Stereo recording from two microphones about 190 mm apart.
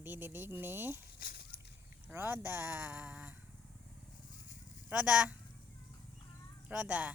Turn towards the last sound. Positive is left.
turn(degrees=-10)  # may be behind; listen again after turning